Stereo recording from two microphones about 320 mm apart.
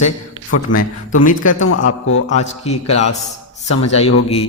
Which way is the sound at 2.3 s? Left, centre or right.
Left.